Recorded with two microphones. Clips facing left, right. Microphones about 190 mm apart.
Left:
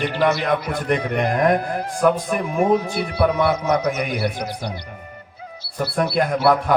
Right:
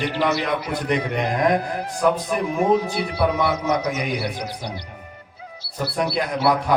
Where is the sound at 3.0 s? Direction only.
55° left (ahead or behind).